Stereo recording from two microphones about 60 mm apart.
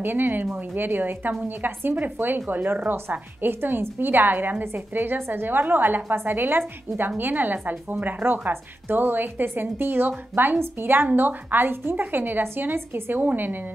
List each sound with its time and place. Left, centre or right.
0.0 s a woman's voice: right